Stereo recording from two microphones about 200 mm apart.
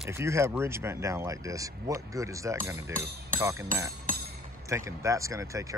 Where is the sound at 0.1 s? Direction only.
15° right (ahead or behind).